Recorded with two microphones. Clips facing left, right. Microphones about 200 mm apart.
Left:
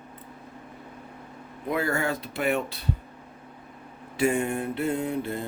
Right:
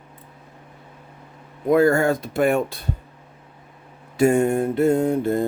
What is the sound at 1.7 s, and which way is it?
Speech, 45° right (ahead or behind).